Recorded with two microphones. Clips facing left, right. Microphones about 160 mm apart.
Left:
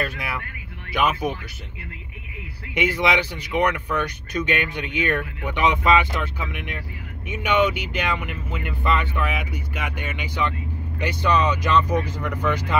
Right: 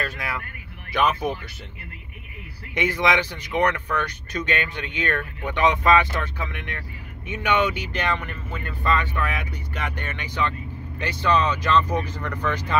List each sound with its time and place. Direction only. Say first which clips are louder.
0.9 s speech: even; 5° left (ahead or behind)
2.7 s speech: left 1 dB; 10° left (ahead or behind)